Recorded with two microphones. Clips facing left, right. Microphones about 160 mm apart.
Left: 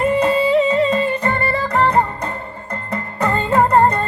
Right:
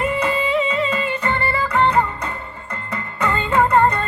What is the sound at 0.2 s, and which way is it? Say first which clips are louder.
Music: left 5 dB; 40° left (ahead or behind).